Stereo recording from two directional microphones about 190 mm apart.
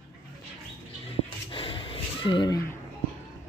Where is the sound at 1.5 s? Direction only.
30° left (ahead or behind).